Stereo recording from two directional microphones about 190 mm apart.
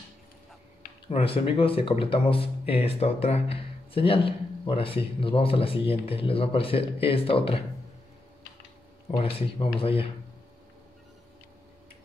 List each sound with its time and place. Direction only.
1.0 s speech: 30° left (ahead or behind)
9.1 s speech: 30° left (ahead or behind)